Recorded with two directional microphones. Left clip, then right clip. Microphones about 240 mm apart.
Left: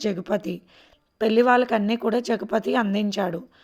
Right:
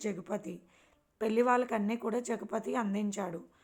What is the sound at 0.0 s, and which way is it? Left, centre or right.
A woman's voice, left.